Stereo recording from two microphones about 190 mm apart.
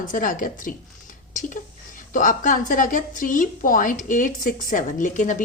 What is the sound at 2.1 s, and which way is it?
A woman's voice, 45° left (ahead or behind).